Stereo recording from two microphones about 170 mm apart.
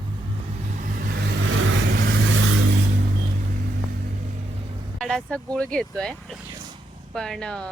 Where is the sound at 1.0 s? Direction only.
75° right (ahead or behind).